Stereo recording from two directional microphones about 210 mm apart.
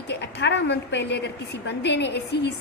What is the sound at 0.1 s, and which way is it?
A woman's voice, 55° left (ahead or behind).